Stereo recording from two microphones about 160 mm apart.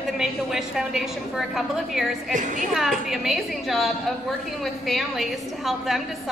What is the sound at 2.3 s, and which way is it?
Speech, 50° right (ahead or behind).